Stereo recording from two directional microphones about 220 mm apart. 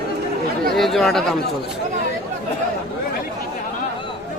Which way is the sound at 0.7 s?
Centre (ahead or behind).